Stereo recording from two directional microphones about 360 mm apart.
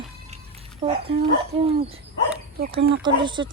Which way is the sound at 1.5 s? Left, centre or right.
Centre.